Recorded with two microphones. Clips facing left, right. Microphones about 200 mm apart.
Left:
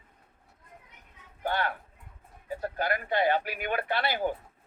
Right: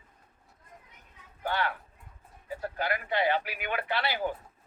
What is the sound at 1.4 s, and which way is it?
A man's voice, 45° left (ahead or behind).